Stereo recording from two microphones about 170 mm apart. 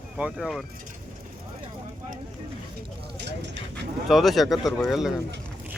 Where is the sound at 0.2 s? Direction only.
5° right (ahead or behind).